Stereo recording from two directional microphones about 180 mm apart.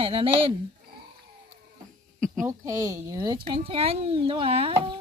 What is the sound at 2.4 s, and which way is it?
Speech, 15° right (ahead or behind).